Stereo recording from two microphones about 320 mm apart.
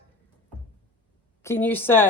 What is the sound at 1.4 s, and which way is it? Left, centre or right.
Speech, centre.